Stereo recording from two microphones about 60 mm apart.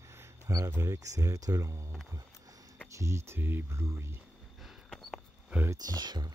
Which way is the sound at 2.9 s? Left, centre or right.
Right.